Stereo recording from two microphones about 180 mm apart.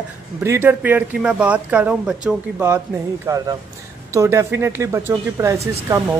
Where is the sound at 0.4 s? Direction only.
15° right (ahead or behind).